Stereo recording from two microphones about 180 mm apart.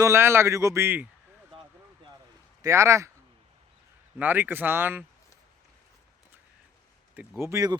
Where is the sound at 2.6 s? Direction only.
15° right (ahead or behind).